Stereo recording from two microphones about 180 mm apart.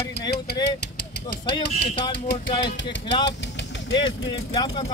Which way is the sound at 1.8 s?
30° left (ahead or behind).